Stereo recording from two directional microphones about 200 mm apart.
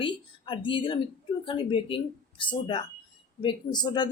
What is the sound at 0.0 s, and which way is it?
Speech, 25° left (ahead or behind).